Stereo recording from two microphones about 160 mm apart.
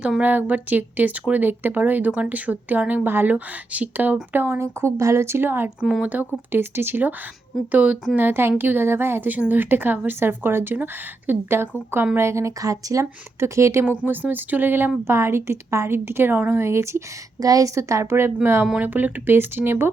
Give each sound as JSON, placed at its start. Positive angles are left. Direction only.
{"t": 0.0, "sound": "a woman's voice", "side_deg": -10}